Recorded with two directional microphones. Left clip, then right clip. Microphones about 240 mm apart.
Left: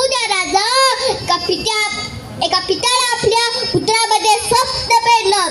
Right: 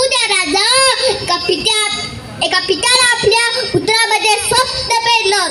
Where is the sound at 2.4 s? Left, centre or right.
Right.